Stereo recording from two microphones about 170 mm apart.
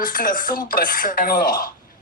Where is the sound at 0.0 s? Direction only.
55° left (ahead or behind).